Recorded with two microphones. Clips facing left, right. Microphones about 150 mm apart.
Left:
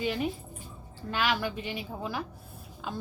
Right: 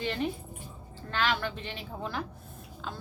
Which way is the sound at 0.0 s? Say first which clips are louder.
Left 1 dB; 10° left (ahead or behind).